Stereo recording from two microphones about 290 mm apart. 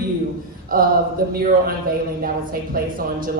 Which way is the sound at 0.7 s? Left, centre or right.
Right.